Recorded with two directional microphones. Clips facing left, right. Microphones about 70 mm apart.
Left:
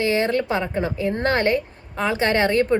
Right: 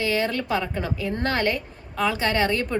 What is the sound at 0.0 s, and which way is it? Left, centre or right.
Speech, left.